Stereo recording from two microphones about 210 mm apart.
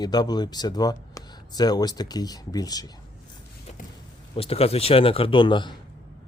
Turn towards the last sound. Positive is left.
turn(degrees=20)  # may be behind; listen again after turning